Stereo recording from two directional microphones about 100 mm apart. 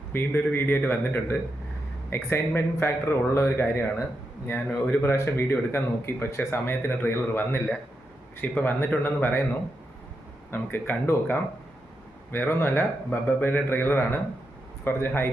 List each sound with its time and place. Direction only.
0.1 s speech: 20° left (ahead or behind)
10.5 s speech: 20° left (ahead or behind)